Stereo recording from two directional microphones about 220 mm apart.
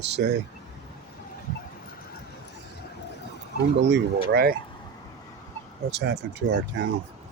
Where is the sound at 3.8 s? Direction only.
50° right (ahead or behind).